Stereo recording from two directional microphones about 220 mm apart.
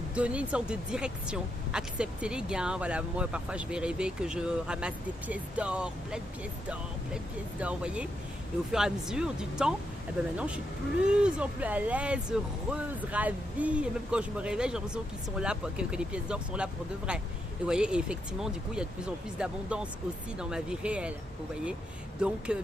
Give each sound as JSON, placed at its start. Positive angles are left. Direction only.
{"t": 0.1, "sound": "speech", "side_deg": -5}
{"t": 17.7, "sound": "speech", "side_deg": -5}
{"t": 22.2, "sound": "speech", "side_deg": -5}